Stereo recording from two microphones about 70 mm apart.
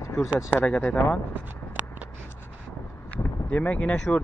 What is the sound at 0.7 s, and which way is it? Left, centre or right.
Speech, centre.